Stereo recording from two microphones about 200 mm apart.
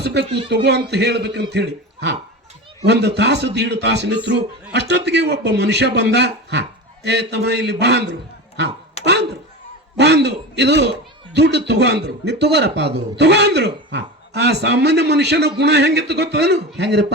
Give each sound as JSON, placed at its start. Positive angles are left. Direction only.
{"t": 0.0, "sound": "a man's voice", "side_deg": -55}
{"t": 9.0, "sound": "a sound", "side_deg": 30}
{"t": 10.0, "sound": "a man's voice", "side_deg": -55}